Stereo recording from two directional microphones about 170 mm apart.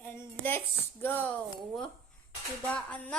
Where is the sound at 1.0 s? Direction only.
10° left (ahead or behind).